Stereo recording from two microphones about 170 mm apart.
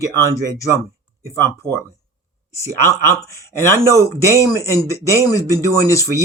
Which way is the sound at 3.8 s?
15° right (ahead or behind).